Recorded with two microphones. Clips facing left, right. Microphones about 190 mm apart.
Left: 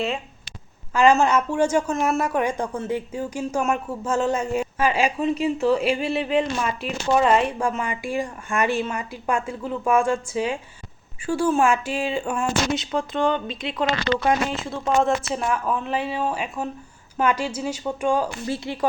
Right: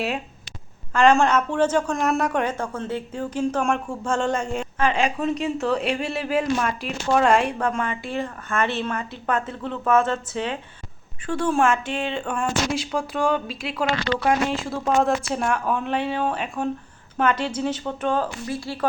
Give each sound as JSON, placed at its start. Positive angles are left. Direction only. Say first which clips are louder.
{"t": 0.9, "sound": "speech", "louder": "even", "side_deg": 10}
{"t": 13.0, "sound": "speech", "louder": "even", "side_deg": -10}
{"t": 18.4, "sound": "speech", "louder": "left 1 dB", "side_deg": 25}